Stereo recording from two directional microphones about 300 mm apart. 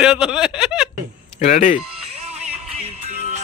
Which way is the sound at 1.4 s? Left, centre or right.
Left.